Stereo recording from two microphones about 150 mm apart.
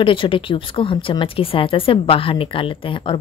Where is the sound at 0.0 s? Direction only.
35° left (ahead or behind).